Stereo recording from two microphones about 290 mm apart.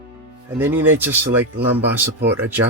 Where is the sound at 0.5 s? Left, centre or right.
Centre.